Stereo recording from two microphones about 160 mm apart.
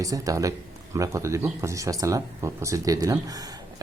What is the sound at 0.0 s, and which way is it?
Speech, 20° right (ahead or behind).